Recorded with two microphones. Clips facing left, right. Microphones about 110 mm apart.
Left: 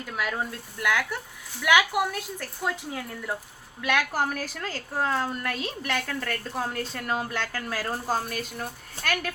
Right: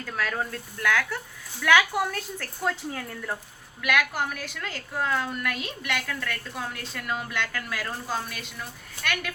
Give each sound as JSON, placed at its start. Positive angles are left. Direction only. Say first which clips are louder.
{"t": 0.0, "sound": "speech", "louder": "even", "side_deg": 15}
{"t": 3.8, "sound": "a woman's voice", "louder": "even", "side_deg": 30}